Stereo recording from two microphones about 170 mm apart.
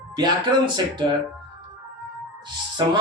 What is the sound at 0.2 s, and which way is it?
Speech, 25° right (ahead or behind).